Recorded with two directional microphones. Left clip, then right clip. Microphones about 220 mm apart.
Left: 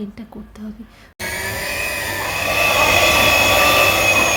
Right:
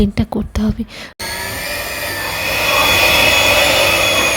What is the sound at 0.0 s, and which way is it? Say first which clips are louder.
Speech: right 15 dB; 40° right (ahead or behind).